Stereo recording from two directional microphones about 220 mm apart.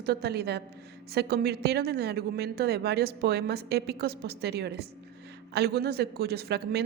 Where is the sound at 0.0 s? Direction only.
45° right (ahead or behind).